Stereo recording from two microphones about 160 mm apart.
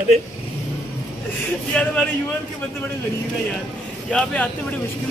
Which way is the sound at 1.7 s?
5° left (ahead or behind).